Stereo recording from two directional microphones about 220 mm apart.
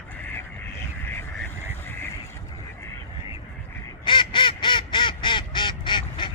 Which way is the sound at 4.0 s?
20° left (ahead or behind).